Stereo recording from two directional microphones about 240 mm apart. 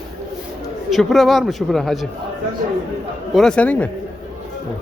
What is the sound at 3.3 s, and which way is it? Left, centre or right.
Speech, centre.